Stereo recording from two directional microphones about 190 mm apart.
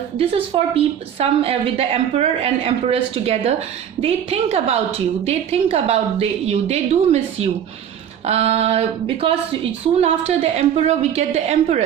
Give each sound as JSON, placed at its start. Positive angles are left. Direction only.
{"t": 0.2, "sound": "a woman's voice", "side_deg": -30}